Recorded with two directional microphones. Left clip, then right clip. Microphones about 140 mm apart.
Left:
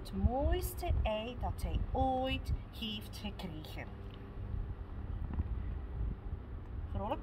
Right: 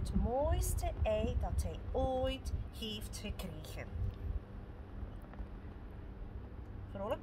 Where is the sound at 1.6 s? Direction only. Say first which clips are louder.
Left 2 dB; 25° left (ahead or behind).